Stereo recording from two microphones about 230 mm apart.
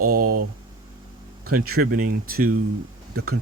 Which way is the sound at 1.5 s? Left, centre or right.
Right.